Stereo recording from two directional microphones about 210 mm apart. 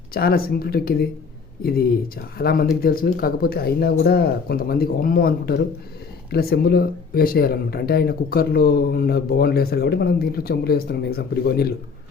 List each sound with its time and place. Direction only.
0.1 s speech: 45° left (ahead or behind)
2.4 s speech: 50° left (ahead or behind)